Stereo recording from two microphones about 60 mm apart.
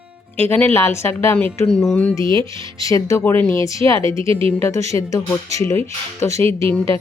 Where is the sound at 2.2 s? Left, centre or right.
Left.